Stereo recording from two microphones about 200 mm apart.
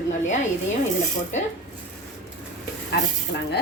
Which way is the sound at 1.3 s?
35° left (ahead or behind).